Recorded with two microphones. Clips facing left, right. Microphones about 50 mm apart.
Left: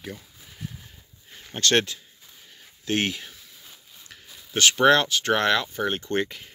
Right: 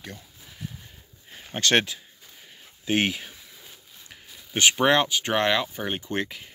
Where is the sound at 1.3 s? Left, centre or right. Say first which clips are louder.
Even; centre.